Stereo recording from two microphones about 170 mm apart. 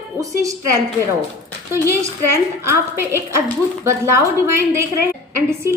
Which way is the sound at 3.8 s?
15° right (ahead or behind).